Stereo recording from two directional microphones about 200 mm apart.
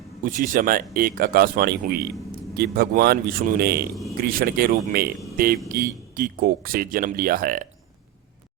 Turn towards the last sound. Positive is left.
turn(degrees=-45)  # may be behind; listen again after turning